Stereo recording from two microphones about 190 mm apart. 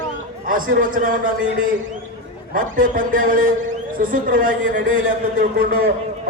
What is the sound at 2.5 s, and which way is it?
A man's voice, 45° right (ahead or behind).